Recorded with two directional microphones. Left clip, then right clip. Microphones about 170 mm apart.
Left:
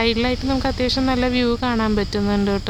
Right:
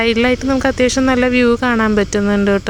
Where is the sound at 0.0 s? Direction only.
25° right (ahead or behind).